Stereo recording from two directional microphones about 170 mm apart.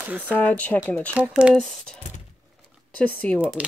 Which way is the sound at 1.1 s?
5° right (ahead or behind).